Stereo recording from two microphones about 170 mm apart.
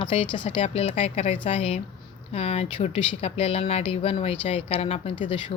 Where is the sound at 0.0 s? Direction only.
30° left (ahead or behind).